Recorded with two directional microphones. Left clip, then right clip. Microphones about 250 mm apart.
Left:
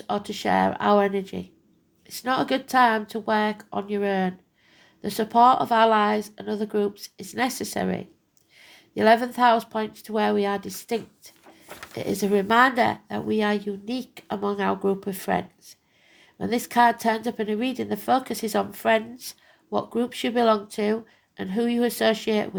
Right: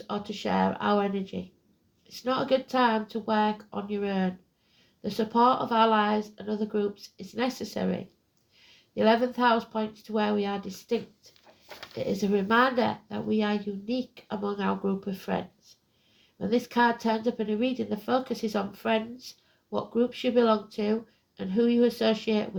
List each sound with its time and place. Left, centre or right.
0.1 s a woman's voice: left